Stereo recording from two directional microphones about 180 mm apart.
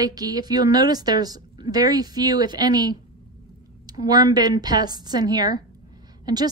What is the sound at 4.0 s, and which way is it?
Speech, 20° right (ahead or behind).